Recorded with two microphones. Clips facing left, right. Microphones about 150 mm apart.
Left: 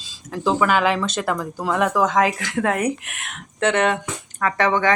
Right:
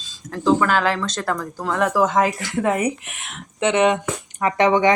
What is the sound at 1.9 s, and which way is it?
Speech, 5° right (ahead or behind).